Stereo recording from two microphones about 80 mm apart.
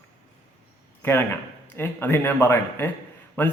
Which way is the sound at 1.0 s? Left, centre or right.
Left.